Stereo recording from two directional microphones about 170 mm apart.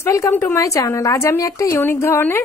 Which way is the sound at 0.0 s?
15° left (ahead or behind).